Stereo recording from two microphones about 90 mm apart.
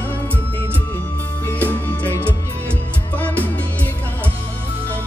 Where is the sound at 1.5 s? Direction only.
20° left (ahead or behind).